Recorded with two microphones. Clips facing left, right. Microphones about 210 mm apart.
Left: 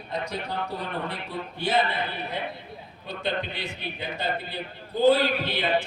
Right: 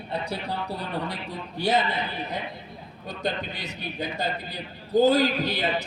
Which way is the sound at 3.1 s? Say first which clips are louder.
Even; 45° right (ahead or behind).